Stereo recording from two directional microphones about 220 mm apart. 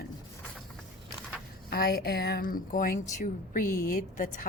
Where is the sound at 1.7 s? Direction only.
45° left (ahead or behind).